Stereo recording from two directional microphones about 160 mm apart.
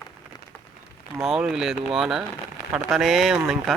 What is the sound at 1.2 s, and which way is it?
Speech, 5° right (ahead or behind).